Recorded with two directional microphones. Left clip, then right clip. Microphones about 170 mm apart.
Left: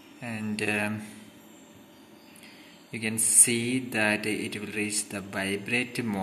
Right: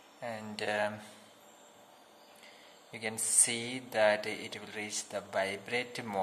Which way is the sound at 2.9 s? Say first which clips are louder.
Left 6 dB; 15° right (ahead or behind).